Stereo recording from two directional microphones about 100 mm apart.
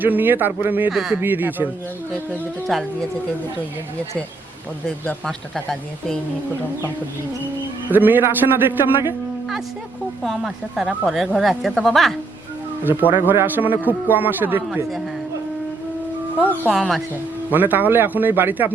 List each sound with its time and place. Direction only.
0.0 s a man's voice: 20° right (ahead or behind)
0.9 s speech: 5° right (ahead or behind)
1.2 s a man's voice: 20° right (ahead or behind)
2.7 s speech: centre (ahead or behind)
7.9 s a man's voice: 20° right (ahead or behind)
10.2 s speech: centre (ahead or behind)
13.0 s a man's voice: 20° right (ahead or behind)
17.5 s a man's voice: 20° right (ahead or behind)